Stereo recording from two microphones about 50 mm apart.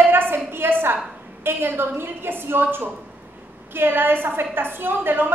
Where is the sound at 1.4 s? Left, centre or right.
Right.